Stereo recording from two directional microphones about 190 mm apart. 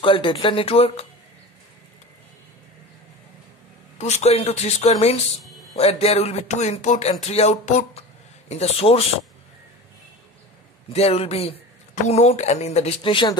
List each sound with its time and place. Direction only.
0.0 s speech: 30° left (ahead or behind)
4.0 s speech: 35° left (ahead or behind)
10.9 s speech: 30° left (ahead or behind)